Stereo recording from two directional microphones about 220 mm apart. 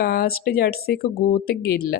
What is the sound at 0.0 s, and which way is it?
Speech, 45° left (ahead or behind).